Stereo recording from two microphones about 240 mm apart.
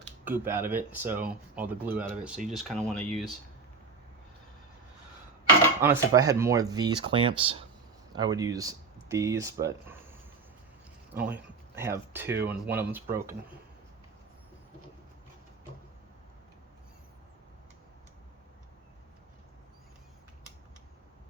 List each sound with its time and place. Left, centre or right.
0.3 s speech: centre
5.8 s speech: centre